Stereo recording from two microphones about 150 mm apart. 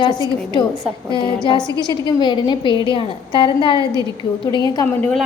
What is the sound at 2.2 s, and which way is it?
A woman's voice, 30° left (ahead or behind).